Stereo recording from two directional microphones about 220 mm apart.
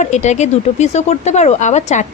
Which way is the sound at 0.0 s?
30° left (ahead or behind).